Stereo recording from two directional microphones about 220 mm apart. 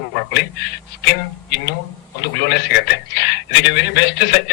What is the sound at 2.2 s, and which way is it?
A man's voice, 50° left (ahead or behind).